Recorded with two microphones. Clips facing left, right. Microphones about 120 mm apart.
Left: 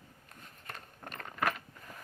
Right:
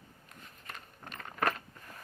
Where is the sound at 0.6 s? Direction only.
45° left (ahead or behind).